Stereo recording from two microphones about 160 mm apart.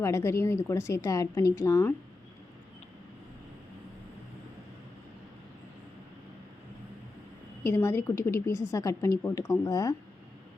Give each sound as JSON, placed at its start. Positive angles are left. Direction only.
{"t": 0.0, "sound": "a woman's voice", "side_deg": 15}
{"t": 7.6, "sound": "a woman's voice", "side_deg": 15}